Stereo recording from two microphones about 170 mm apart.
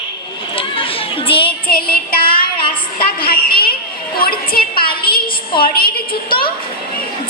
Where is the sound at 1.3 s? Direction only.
30° left (ahead or behind).